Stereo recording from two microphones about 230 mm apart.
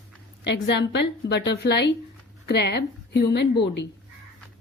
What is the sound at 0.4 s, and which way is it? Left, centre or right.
A woman's voice, left.